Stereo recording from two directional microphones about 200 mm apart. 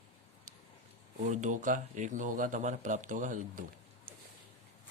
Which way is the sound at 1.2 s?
40° right (ahead or behind).